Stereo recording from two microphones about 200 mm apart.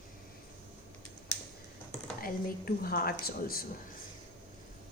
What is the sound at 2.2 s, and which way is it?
A woman's voice, 45° left (ahead or behind).